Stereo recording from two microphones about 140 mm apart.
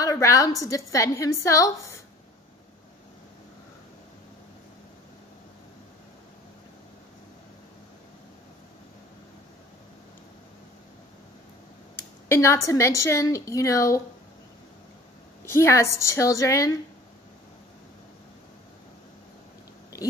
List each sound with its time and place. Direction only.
0.0 s a woman's voice: 25° left (ahead or behind)
11.9 s a woman's voice: 20° left (ahead or behind)
15.5 s a woman's voice: 20° left (ahead or behind)